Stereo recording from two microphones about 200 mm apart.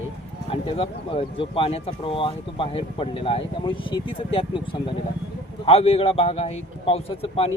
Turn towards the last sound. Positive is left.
turn(degrees=30)  # may be behind; listen again after turning